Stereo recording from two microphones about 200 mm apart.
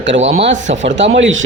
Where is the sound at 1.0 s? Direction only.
70° right (ahead or behind).